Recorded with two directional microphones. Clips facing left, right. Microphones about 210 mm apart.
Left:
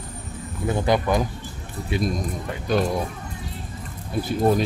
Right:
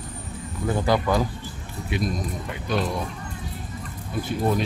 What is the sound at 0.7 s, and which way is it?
Speech, 20° left (ahead or behind).